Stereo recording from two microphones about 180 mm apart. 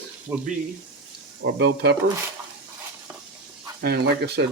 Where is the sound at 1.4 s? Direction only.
65° right (ahead or behind).